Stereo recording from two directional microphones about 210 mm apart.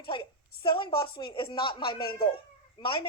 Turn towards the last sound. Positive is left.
turn(degrees=25)  # may be behind; listen again after turning